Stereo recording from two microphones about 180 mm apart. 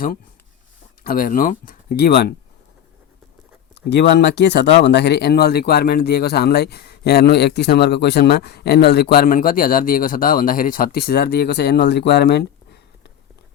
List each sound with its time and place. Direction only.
1.0 s speech: 50° left (ahead or behind)
3.8 s speech: 70° left (ahead or behind)
9.1 s speech: 50° left (ahead or behind)